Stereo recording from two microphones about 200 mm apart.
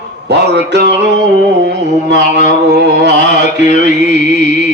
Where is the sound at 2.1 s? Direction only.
60° right (ahead or behind).